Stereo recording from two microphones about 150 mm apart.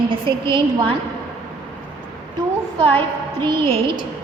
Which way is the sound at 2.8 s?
30° right (ahead or behind).